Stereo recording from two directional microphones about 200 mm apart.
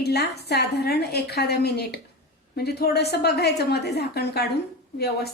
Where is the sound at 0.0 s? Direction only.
55° left (ahead or behind).